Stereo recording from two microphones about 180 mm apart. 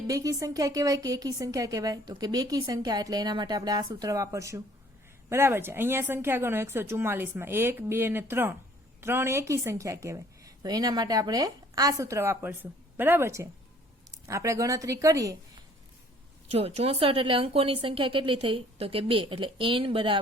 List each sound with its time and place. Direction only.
0.1 s a woman's voice: 20° right (ahead or behind)
16.5 s a woman's voice: 35° right (ahead or behind)